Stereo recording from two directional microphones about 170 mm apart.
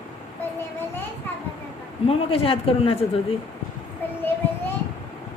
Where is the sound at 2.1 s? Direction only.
35° left (ahead or behind).